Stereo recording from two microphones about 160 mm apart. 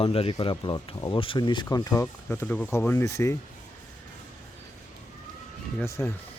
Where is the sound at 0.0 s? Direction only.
35° left (ahead or behind).